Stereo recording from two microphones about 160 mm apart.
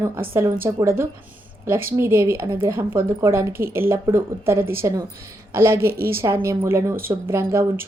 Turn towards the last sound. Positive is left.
turn(degrees=-15)  # may be behind; listen again after turning